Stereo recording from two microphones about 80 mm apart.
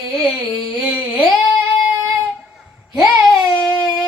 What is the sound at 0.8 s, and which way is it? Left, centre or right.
Humming, centre.